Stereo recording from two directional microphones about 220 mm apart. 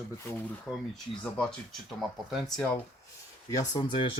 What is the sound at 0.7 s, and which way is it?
Speech, centre (ahead or behind).